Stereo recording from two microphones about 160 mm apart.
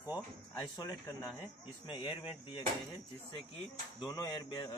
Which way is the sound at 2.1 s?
35° left (ahead or behind).